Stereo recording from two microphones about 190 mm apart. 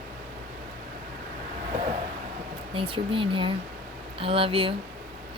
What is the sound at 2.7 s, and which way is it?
Speech, 25° right (ahead or behind).